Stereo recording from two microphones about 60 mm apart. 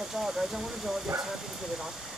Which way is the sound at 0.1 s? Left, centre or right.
Centre.